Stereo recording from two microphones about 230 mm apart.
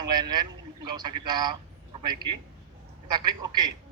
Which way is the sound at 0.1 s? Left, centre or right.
Centre.